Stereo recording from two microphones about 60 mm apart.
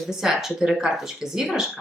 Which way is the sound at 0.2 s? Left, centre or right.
Centre.